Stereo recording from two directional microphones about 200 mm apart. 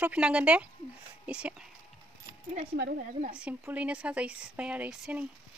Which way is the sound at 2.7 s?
50° right (ahead or behind).